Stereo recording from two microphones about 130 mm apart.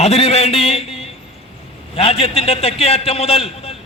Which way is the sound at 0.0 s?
55° left (ahead or behind).